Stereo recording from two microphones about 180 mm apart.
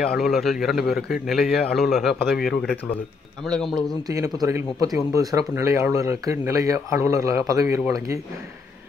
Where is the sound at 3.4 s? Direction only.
Centre (ahead or behind).